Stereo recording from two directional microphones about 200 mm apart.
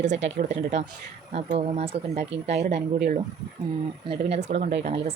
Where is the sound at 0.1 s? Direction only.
35° right (ahead or behind).